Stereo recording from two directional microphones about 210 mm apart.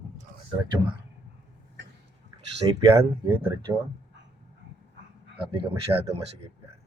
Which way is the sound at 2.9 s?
15° right (ahead or behind).